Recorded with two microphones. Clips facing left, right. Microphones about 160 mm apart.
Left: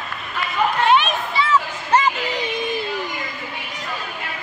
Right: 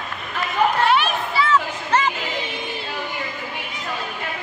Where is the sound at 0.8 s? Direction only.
20° left (ahead or behind).